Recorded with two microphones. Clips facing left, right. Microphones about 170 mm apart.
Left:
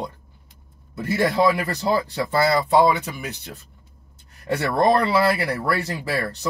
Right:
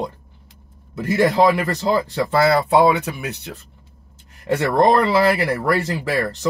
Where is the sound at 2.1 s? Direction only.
65° right (ahead or behind).